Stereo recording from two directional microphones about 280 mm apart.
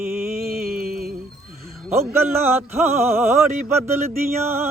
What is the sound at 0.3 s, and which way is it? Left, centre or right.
Music, right.